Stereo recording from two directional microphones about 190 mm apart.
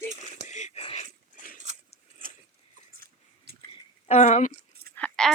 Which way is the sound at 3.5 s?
60° right (ahead or behind).